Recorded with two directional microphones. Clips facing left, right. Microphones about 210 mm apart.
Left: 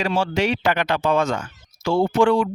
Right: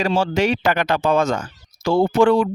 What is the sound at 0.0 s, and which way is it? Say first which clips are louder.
Speech: right 3 dB; 40° right (ahead or behind).